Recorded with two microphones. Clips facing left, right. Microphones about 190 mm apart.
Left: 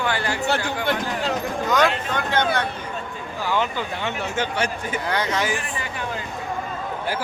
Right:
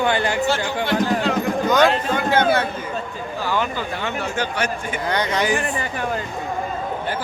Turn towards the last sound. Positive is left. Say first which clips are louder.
# right 3 dB
turn(degrees=5)  # may be behind; listen again after turning